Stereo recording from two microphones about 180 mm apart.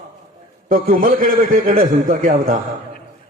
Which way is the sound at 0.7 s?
50° right (ahead or behind).